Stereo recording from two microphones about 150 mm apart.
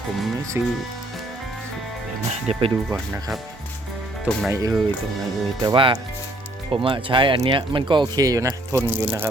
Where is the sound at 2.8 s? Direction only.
15° right (ahead or behind).